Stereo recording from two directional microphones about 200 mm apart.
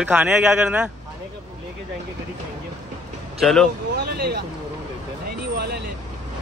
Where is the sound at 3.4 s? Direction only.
Centre (ahead or behind).